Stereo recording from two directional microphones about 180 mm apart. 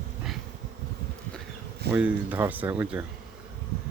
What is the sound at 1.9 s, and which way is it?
Speech, 10° right (ahead or behind).